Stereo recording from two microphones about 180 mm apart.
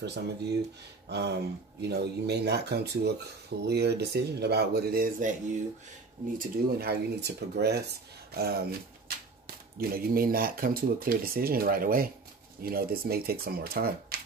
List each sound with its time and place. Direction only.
0.0 s speech: 65° right (ahead or behind)
6.3 s speech: 55° right (ahead or behind)